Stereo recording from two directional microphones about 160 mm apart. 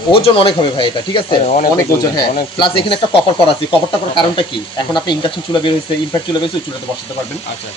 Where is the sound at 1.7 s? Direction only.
20° left (ahead or behind).